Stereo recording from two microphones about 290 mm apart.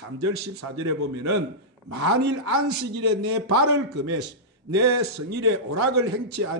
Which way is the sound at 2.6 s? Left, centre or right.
Right.